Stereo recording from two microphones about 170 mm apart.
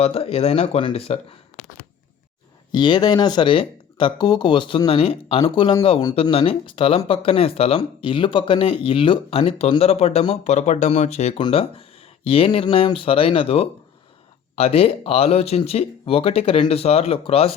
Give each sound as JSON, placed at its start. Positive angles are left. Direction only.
{"t": 0.0, "sound": "speech", "side_deg": 35}
{"t": 2.7, "sound": "speech", "side_deg": 25}
{"t": 11.3, "sound": "speech", "side_deg": 30}